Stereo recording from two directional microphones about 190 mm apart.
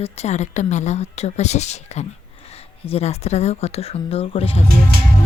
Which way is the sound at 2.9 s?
35° left (ahead or behind).